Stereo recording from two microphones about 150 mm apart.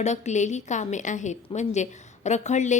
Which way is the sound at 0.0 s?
50° left (ahead or behind).